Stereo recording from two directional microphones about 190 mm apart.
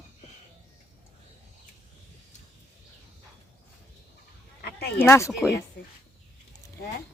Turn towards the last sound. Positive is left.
turn(degrees=55)  # may be behind; listen again after turning